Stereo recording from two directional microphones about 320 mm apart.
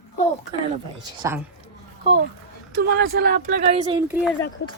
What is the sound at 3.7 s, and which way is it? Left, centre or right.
Speech, centre.